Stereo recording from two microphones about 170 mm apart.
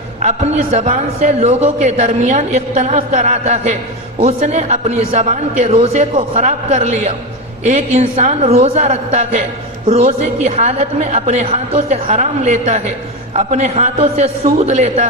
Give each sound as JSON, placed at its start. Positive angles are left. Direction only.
{"t": 0.2, "sound": "a man's voice", "side_deg": -40}